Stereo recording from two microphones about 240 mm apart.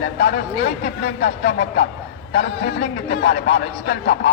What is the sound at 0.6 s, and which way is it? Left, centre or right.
Speech, left.